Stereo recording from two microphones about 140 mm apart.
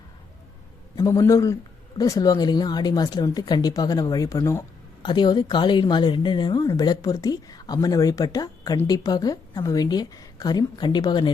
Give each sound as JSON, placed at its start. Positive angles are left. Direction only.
{"t": 0.9, "sound": "a man's voice", "side_deg": 25}
{"t": 5.0, "sound": "a woman's voice", "side_deg": 30}